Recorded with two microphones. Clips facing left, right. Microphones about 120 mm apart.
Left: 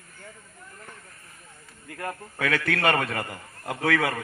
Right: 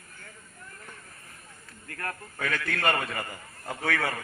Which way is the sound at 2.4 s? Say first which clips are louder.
Left 4 dB; 65° left (ahead or behind).